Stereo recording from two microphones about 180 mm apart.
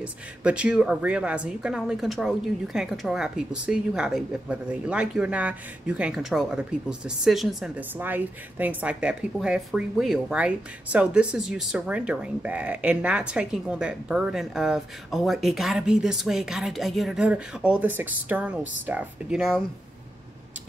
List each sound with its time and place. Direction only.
0.0 s a woman's voice: 5° right (ahead or behind)